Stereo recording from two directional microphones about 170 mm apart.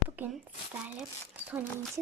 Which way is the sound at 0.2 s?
10° right (ahead or behind).